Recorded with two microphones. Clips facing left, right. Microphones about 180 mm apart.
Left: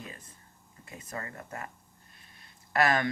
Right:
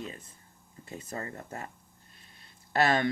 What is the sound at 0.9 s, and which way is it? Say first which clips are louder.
Speech: right 2 dB; 30° right (ahead or behind).